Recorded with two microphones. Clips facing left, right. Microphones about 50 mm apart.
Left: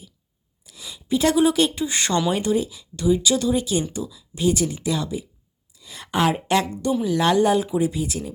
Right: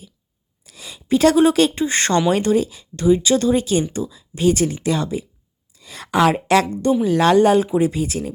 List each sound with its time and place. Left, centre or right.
0.6 s a sound: right
1.7 s speech: right
4.0 s speech: right
4.4 s speech: right
7.0 s speech: right